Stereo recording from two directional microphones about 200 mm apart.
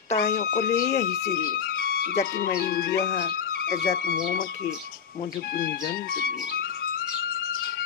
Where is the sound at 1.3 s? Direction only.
50° left (ahead or behind).